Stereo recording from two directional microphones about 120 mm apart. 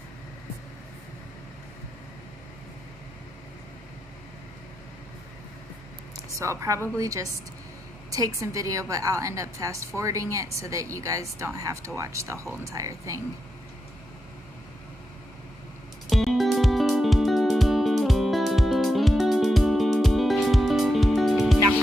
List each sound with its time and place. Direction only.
6.3 s a woman's voice: 25° right (ahead or behind)
16.1 s music: centre (ahead or behind)